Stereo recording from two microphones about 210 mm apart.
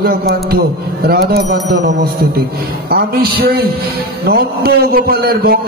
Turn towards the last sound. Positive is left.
turn(degrees=-45)  # may be behind; listen again after turning